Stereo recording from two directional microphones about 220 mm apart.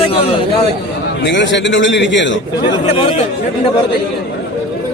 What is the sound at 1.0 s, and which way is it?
A man's voice, 50° left (ahead or behind).